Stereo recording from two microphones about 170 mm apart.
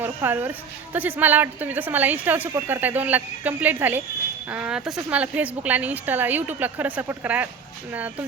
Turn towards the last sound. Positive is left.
turn(degrees=-10)  # may be behind; listen again after turning